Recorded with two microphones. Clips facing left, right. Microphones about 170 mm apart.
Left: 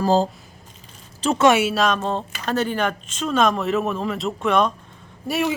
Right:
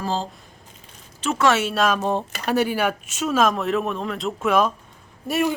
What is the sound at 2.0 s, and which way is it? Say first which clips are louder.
Speech: right 2 dB; 15° right (ahead or behind).